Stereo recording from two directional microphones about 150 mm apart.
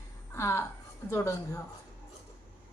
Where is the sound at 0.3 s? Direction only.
20° left (ahead or behind).